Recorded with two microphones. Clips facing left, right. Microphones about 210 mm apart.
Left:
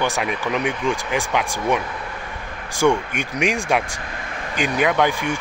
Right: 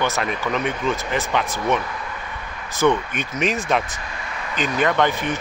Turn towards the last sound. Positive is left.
turn(degrees=15)  # may be behind; listen again after turning